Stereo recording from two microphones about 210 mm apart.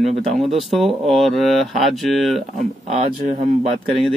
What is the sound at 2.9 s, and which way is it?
Speech, 35° right (ahead or behind).